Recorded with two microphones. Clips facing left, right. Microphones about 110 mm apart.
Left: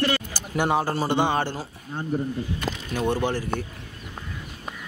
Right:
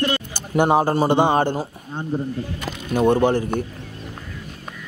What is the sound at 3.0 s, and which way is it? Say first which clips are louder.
Speech: right 8 dB; 50° right (ahead or behind).